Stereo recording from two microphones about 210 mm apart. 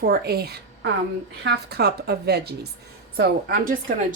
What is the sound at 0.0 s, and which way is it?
A woman's voice, 50° right (ahead or behind).